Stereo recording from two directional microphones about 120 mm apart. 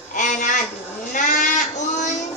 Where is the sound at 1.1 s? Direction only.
90° left.